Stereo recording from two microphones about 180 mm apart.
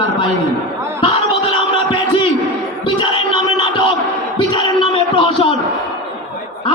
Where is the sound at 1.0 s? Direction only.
30° left (ahead or behind).